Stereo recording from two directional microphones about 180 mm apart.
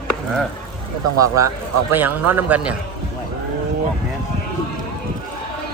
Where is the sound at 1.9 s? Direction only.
10° right (ahead or behind).